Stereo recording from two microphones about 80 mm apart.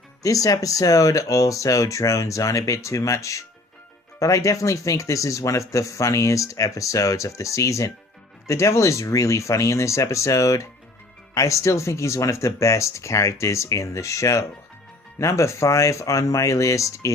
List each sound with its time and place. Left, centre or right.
0.2 s speech: left